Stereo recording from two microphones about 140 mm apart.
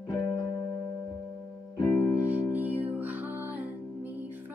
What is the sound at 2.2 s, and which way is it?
Music, 10° right (ahead or behind).